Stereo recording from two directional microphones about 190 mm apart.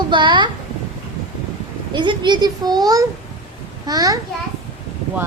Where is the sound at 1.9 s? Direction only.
25° right (ahead or behind).